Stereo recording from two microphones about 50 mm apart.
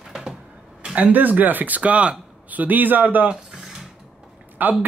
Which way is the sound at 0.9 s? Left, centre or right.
Right.